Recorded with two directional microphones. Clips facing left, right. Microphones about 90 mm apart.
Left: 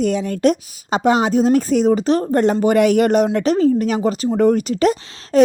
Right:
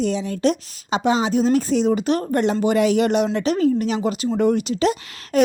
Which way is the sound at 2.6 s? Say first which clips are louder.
Left 3 dB; 55° left (ahead or behind).